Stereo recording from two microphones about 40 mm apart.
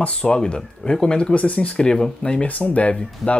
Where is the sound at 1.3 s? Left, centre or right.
Left.